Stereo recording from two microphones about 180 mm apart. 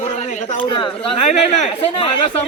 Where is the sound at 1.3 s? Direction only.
35° left (ahead or behind).